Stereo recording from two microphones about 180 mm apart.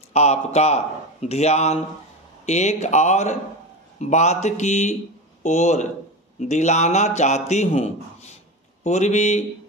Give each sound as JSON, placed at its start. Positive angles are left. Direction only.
{"t": 0.1, "sound": "a man's voice", "side_deg": 40}